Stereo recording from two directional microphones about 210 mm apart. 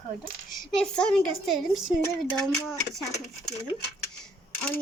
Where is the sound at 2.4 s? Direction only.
Centre (ahead or behind).